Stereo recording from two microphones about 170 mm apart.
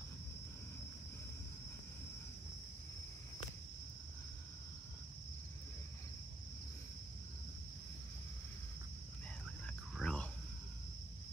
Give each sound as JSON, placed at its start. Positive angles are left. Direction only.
{"t": 9.9, "sound": "cricket", "side_deg": 5}